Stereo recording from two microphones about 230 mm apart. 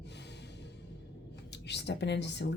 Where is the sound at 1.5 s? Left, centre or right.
Left.